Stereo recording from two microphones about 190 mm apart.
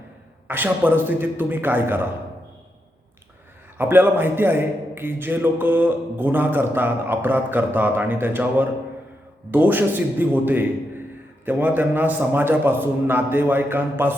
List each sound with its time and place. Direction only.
0.4 s a man's voice: 10° right (ahead or behind)
3.8 s a man's voice: 10° right (ahead or behind)